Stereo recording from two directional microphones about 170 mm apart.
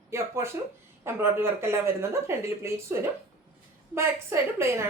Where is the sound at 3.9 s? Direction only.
15° right (ahead or behind).